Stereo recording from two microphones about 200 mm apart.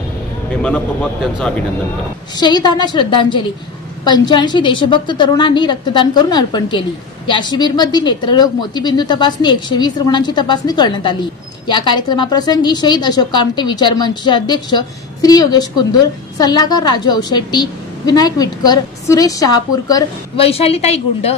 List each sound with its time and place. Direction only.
0.6 s speech: 5° left (ahead or behind)
2.3 s a woman's voice: 20° left (ahead or behind)